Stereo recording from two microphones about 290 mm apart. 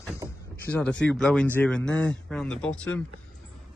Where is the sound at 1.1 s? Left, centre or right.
Centre.